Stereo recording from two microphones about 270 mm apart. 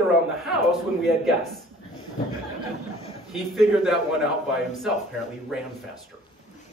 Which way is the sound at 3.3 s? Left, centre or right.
Centre.